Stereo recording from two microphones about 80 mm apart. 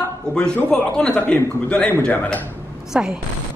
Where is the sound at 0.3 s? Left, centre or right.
Centre.